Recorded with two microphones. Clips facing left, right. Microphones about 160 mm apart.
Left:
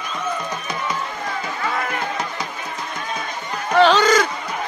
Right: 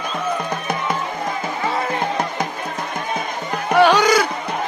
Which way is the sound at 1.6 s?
25° right (ahead or behind).